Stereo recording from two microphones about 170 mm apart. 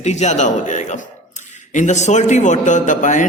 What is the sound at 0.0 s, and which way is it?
A man's voice, 40° left (ahead or behind).